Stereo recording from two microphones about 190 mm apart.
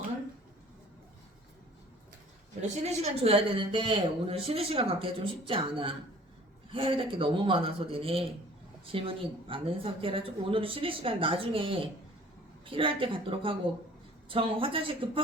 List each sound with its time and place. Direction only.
2.6 s speech: 35° right (ahead or behind)